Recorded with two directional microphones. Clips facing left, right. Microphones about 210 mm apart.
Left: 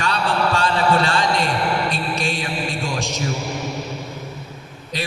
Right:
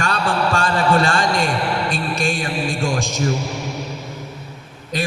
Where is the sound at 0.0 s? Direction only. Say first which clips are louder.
Right 1 dB; 50° right (ahead or behind).